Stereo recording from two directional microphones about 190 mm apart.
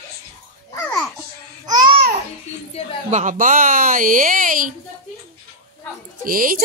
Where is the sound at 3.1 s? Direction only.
40° right (ahead or behind).